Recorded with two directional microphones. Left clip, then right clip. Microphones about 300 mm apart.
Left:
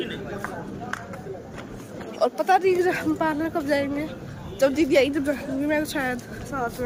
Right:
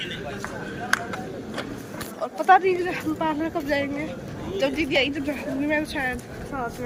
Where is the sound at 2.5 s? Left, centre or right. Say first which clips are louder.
Right 4 dB; centre.